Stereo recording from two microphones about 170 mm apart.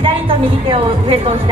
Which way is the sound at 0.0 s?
30° right (ahead or behind).